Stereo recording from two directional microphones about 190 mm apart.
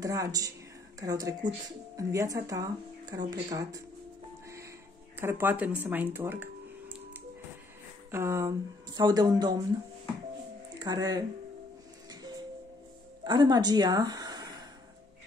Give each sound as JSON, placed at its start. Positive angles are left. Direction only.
{"t": 0.0, "sound": "speech", "side_deg": -20}
{"t": 5.2, "sound": "speech", "side_deg": -10}
{"t": 8.1, "sound": "speech", "side_deg": -15}
{"t": 10.8, "sound": "speech", "side_deg": -20}
{"t": 12.1, "sound": "music", "side_deg": -20}
{"t": 13.2, "sound": "a woman's voice", "side_deg": -20}